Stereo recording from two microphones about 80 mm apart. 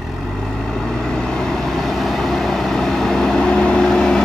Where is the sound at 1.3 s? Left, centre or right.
Centre.